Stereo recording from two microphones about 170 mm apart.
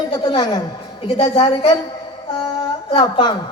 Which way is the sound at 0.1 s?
25° left (ahead or behind).